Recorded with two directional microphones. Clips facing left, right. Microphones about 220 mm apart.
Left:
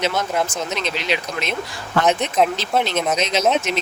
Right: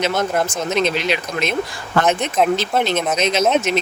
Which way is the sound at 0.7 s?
50° right (ahead or behind).